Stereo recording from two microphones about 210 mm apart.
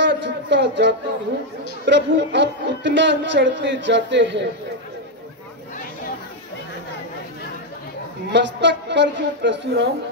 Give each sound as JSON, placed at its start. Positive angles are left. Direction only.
{"t": 0.0, "sound": "a man's voice", "side_deg": -60}
{"t": 8.3, "sound": "a woman's voice", "side_deg": -55}